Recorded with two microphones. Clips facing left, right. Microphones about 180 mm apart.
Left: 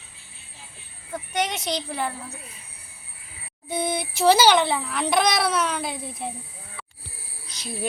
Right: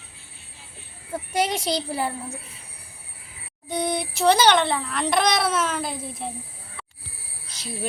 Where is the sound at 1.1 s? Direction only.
30° right (ahead or behind).